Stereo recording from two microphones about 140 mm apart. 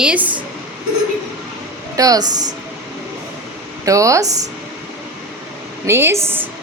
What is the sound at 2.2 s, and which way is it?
Speech, 60° right (ahead or behind).